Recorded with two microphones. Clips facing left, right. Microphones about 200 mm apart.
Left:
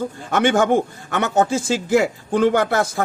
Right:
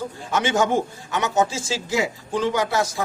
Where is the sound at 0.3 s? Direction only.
55° left (ahead or behind).